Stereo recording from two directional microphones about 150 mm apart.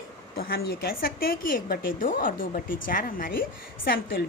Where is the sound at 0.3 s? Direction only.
90° left; by 3.3 s 70° left (ahead or behind).